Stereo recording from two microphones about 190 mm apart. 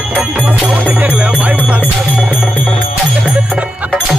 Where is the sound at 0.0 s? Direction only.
5° right (ahead or behind).